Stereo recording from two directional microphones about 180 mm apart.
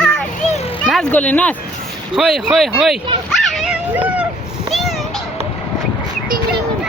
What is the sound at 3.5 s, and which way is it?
Dog, 5° right (ahead or behind).